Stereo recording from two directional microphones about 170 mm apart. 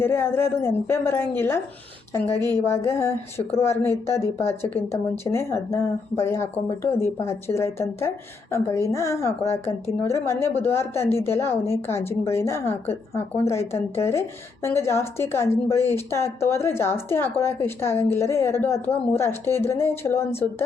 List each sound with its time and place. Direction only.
0.0 s a woman's voice: 15° left (ahead or behind)